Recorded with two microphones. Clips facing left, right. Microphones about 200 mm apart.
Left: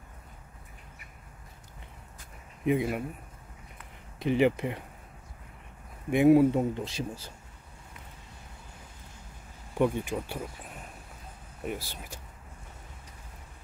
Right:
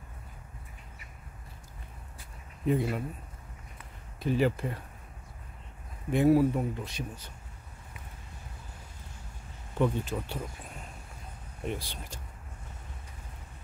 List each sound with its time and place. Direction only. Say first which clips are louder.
2.6 s speech: left 1 dB; 15° left (ahead or behind)
4.2 s speech: left 3 dB; 20° left (ahead or behind)
6.1 s speech: left 3 dB; 20° left (ahead or behind)
9.8 s speech: left 2 dB; 10° left (ahead or behind)
11.6 s speech: even; 5° left (ahead or behind)